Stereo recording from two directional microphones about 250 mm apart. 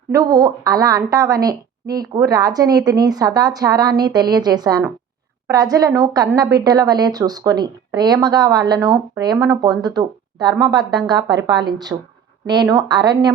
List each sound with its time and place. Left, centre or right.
0.1 s a woman's voice: centre